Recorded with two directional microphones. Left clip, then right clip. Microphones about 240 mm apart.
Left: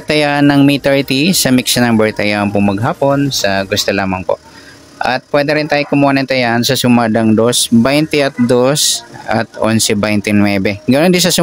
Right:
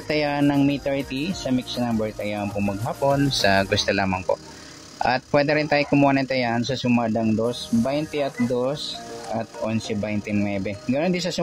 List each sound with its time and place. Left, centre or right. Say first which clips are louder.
0.1 s speech: left 11 dB; centre
3.1 s speech: left 3 dB; centre; by 11.3 s left